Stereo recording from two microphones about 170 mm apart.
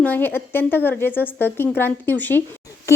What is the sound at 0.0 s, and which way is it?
A woman's voice, 10° left (ahead or behind).